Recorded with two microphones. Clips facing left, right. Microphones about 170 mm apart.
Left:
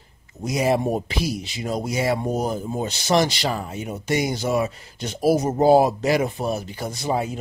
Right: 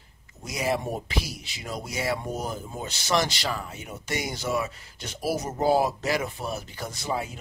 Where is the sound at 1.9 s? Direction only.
20° left (ahead or behind).